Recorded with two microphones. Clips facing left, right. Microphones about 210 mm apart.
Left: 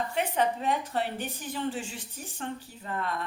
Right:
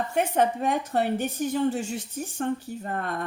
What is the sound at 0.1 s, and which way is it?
A woman's voice, 45° right (ahead or behind).